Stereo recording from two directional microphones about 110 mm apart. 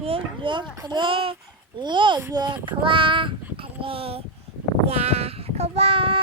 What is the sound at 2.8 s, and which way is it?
Child singing, 50° right (ahead or behind).